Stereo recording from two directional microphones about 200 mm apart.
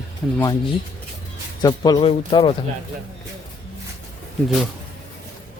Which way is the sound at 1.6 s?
20° left (ahead or behind).